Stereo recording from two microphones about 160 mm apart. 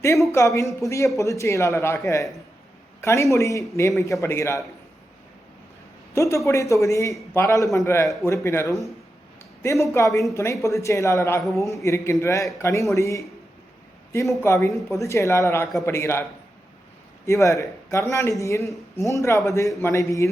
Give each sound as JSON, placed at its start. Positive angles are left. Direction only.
{"t": 0.0, "sound": "a man's voice", "side_deg": 20}
{"t": 6.1, "sound": "a man's voice", "side_deg": 20}
{"t": 14.7, "sound": "speech", "side_deg": 0}
{"t": 14.9, "sound": "speech", "side_deg": 20}
{"t": 17.2, "sound": "a man's voice", "side_deg": 20}